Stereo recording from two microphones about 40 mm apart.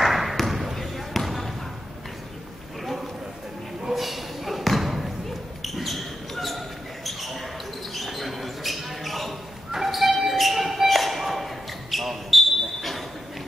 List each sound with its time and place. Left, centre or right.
0.0 s basketball bounce: centre
0.7 s basketball bounce: centre
3.9 s basketball bounce: centre
9.7 s music: centre